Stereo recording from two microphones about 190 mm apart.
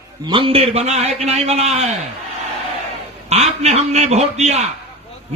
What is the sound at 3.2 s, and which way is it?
A man's voice, 35° right (ahead or behind).